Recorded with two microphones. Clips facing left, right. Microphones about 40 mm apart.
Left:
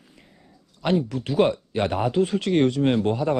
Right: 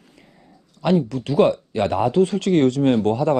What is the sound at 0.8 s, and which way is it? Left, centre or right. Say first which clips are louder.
Speech: right 4 dB; right.